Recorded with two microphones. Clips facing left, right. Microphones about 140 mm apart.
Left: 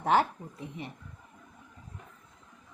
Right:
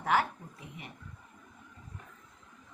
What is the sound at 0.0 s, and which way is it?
Speech, 30° left (ahead or behind).